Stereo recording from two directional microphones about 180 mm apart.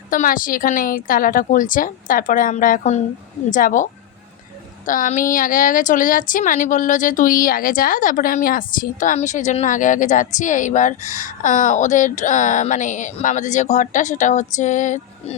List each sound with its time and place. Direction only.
0.1 s a woman's voice: 50° left (ahead or behind)
4.9 s a woman's voice: 45° left (ahead or behind)